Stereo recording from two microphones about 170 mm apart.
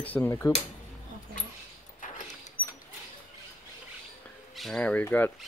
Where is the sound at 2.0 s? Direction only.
50° left (ahead or behind).